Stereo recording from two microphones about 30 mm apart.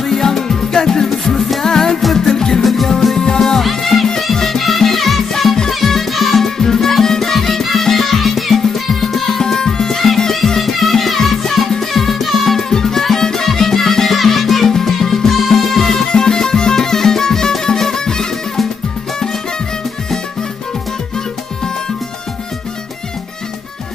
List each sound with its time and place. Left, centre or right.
0.0 s music: centre
2.1 s music: centre
3.6 s music: centre
9.4 s music: centre
12.6 s music: centre